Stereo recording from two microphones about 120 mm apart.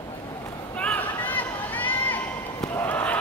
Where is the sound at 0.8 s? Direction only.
15° left (ahead or behind).